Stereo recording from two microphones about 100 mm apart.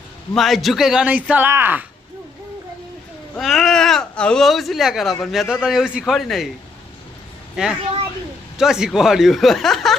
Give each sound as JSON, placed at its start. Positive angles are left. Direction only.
{"t": 0.3, "sound": "a man's voice", "side_deg": 0}
{"t": 3.3, "sound": "speech", "side_deg": 0}
{"t": 7.5, "sound": "speech", "side_deg": -5}